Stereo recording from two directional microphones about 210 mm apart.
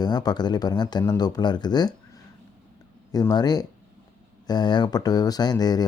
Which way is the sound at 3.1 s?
20° left (ahead or behind).